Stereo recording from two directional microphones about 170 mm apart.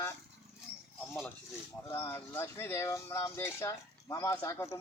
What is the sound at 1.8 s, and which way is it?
Speech, 15° left (ahead or behind).